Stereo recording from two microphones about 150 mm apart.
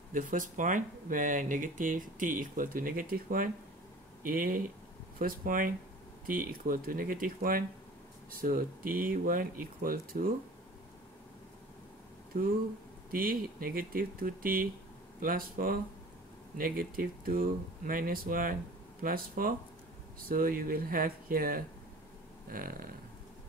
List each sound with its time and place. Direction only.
0.1 s speech: 60° right (ahead or behind)
12.3 s speech: 70° right (ahead or behind)